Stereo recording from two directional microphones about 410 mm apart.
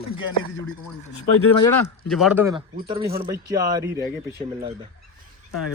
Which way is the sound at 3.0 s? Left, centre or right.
Right.